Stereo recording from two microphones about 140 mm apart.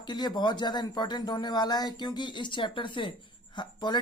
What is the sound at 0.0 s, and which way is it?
Speech, 30° left (ahead or behind).